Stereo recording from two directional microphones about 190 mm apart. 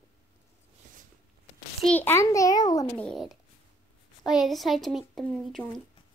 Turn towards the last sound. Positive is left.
turn(degrees=0)  # may be behind; listen again after turning